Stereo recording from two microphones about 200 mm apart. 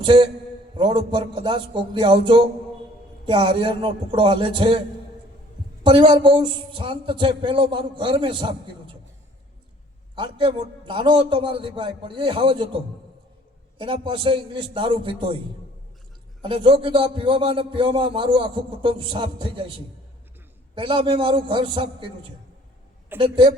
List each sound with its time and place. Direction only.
0.0 s a man's voice: 25° right (ahead or behind)
5.8 s a man's voice: 25° right (ahead or behind)
10.2 s a man's voice: 25° right (ahead or behind)
16.4 s a man's voice: 25° right (ahead or behind)
20.7 s a man's voice: 25° right (ahead or behind)